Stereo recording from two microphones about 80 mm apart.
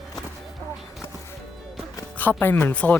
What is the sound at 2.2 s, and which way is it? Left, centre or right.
Speech, left.